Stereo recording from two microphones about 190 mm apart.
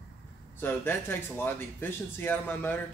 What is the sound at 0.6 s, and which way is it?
Speech, 10° left (ahead or behind).